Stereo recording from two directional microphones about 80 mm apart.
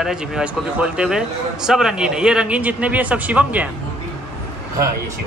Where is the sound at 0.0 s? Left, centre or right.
Centre.